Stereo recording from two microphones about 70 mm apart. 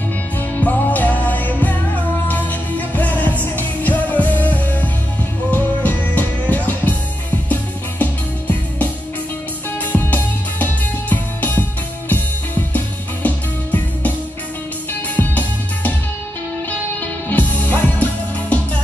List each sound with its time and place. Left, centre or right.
0.6 s music: left
2.9 s music: left
8.0 s music: left
9.9 s music: left
15.1 s music: left
17.3 s music: left